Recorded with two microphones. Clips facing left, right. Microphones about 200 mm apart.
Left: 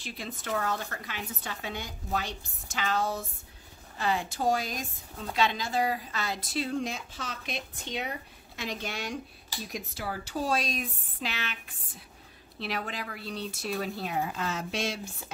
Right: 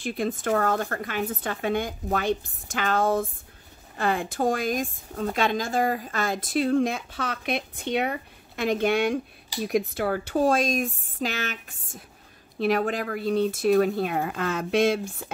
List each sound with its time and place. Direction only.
0.0 s a woman's voice: 50° right (ahead or behind)